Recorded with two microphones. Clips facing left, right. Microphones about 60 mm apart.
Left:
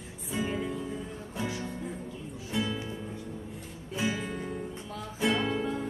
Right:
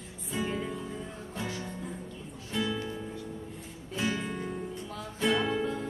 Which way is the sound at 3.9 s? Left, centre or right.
Centre.